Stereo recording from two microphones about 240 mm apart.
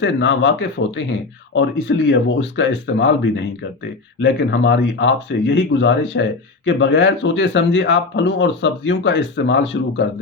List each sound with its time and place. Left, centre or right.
0.0 s speech: left